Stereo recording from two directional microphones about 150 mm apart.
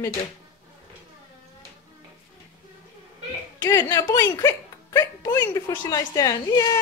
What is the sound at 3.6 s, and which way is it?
A woman's voice, 20° left (ahead or behind).